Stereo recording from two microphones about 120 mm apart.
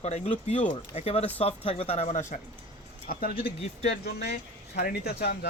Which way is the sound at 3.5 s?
55° left (ahead or behind).